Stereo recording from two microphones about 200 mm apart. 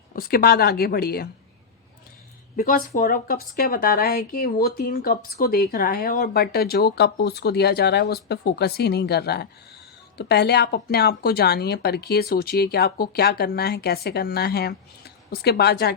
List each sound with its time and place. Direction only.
0.2 s speech: 50° left (ahead or behind)
2.6 s speech: 45° left (ahead or behind)